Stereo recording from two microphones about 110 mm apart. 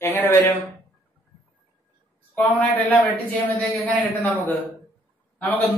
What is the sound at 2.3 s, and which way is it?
Speech, 20° left (ahead or behind).